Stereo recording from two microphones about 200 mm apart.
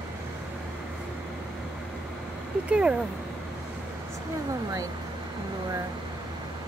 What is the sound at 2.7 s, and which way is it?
Speech, 5° right (ahead or behind).